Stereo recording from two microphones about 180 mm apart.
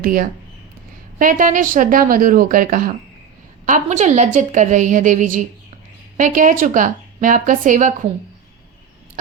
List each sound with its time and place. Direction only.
0.0 s a woman's voice: 55° right (ahead or behind)
3.7 s a woman's voice: 40° right (ahead or behind)